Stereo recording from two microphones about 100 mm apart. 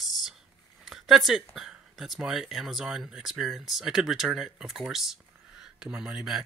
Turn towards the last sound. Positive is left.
turn(degrees=-5)  # may be behind; listen again after turning